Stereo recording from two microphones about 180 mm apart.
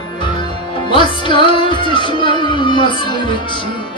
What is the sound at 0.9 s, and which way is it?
Music, 25° left (ahead or behind).